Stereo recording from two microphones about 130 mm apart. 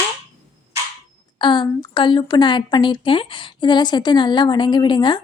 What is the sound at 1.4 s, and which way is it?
A woman's voice, 35° left (ahead or behind).